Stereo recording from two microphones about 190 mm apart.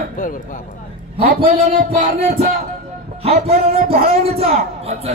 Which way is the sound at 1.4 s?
40° right (ahead or behind).